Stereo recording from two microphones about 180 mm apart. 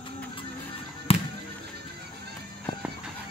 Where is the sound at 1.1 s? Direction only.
30° left (ahead or behind).